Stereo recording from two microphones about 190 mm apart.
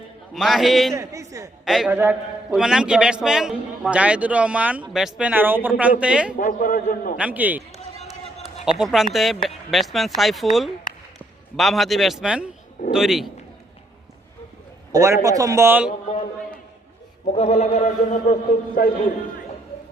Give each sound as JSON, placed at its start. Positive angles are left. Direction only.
{"t": 0.3, "sound": "speech", "side_deg": 0}
{"t": 0.9, "sound": "a man's voice", "side_deg": -15}
{"t": 1.6, "sound": "a man's voice", "side_deg": 0}
{"t": 6.3, "sound": "a man's voice", "side_deg": 45}
{"t": 7.2, "sound": "a man's voice", "side_deg": -10}
{"t": 8.6, "sound": "a man's voice", "side_deg": 0}
{"t": 14.9, "sound": "a man's voice", "side_deg": -15}
{"t": 17.2, "sound": "a man's voice", "side_deg": 35}